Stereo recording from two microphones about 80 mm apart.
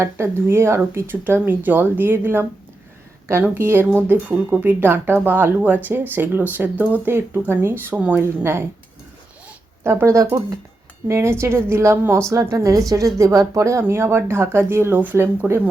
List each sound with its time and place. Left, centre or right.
0.0 s speech: right
9.8 s a woman's voice: right
13.8 s speech: right